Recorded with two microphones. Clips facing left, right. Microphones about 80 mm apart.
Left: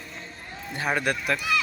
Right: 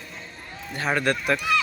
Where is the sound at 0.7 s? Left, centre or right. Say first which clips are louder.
Right 2 dB; centre.